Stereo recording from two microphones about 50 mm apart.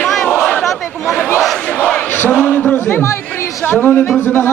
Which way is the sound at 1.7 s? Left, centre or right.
Left.